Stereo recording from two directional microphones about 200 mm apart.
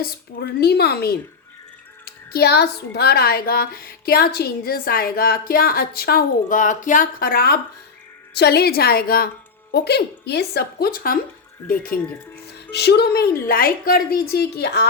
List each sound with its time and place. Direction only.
0.0 s speech: 50° left (ahead or behind)
12.7 s speech: 55° left (ahead or behind)